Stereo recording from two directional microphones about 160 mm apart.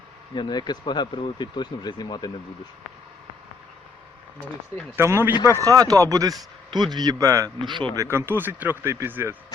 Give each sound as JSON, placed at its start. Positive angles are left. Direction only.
{"t": 0.3, "sound": "speech", "side_deg": 30}
{"t": 4.9, "sound": "speech", "side_deg": -15}
{"t": 8.0, "sound": "speech", "side_deg": -15}